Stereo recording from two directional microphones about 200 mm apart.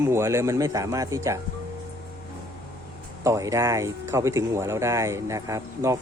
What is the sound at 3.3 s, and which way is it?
Speech, 15° right (ahead or behind).